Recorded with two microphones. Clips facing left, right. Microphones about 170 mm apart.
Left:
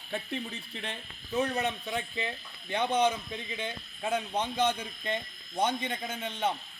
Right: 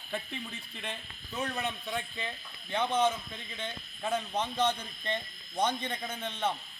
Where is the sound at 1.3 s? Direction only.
20° left (ahead or behind).